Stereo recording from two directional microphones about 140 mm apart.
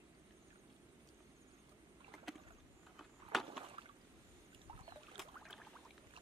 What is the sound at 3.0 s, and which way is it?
Vehicle, centre (ahead or behind).